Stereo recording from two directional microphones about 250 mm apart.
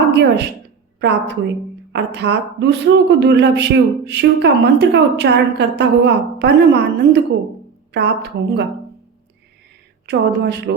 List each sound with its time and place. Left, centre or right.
0.1 s a woman's voice: right
10.1 s speech: right